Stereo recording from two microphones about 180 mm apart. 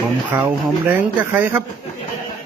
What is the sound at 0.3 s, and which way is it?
Speech, 10° right (ahead or behind).